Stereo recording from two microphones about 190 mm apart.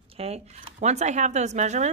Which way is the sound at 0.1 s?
35° right (ahead or behind).